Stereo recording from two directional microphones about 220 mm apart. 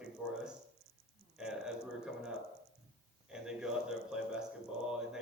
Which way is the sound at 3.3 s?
5° right (ahead or behind).